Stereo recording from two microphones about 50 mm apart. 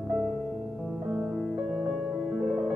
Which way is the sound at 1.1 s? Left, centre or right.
Centre.